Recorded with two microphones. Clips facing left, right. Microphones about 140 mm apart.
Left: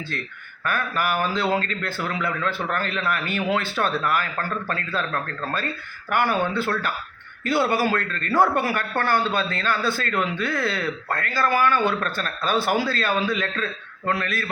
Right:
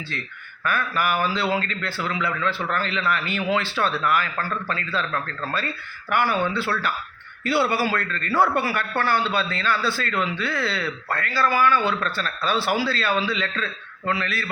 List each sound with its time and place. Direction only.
0.6 s a man's voice: 45° left (ahead or behind)